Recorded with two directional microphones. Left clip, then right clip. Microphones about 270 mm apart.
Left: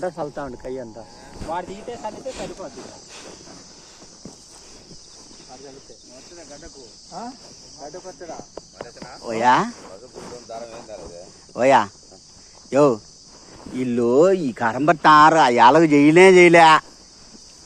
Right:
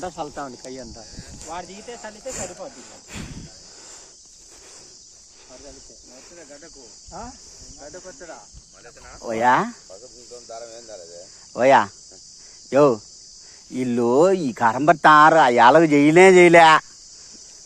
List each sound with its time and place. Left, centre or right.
0.6 s speech: right
1.5 s speech: centre
3.1 s a sound: right
7.8 s speech: centre
9.2 s speech: right
11.5 s speech: right